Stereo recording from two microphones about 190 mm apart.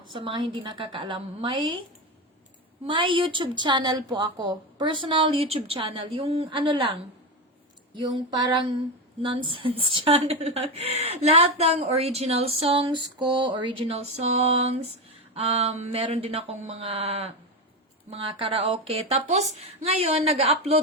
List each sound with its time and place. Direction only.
0.1 s a woman's voice: 25° right (ahead or behind)
2.8 s a woman's voice: 25° right (ahead or behind)